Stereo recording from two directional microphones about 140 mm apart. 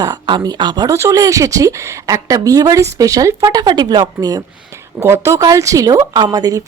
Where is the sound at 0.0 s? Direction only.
30° right (ahead or behind).